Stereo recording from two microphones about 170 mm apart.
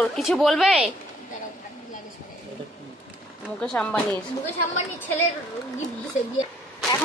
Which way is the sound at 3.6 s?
5° left (ahead or behind).